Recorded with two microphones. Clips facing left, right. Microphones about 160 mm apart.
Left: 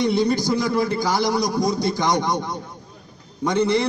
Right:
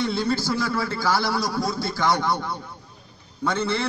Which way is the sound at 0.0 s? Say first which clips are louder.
Left 5 dB; 15° left (ahead or behind).